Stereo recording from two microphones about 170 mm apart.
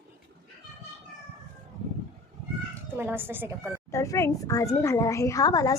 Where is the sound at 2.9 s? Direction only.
10° right (ahead or behind).